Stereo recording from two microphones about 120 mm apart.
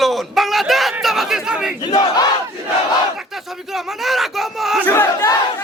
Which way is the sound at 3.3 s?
Centre (ahead or behind).